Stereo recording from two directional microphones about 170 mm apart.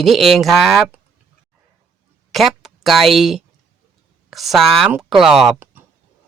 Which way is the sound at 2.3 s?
Centre (ahead or behind).